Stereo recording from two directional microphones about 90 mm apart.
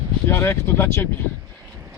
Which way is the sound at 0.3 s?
25° left (ahead or behind).